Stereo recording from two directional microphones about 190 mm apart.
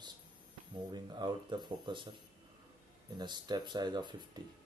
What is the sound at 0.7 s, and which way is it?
Speech, 20° right (ahead or behind).